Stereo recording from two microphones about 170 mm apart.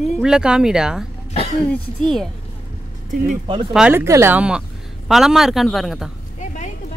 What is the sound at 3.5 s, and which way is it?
Speech, 30° right (ahead or behind).